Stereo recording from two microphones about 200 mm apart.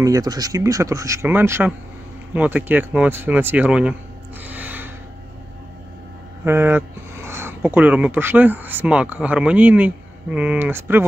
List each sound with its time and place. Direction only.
0.0 s speech: 20° right (ahead or behind)
4.5 s a sound: 10° right (ahead or behind)
6.4 s speech: 10° right (ahead or behind)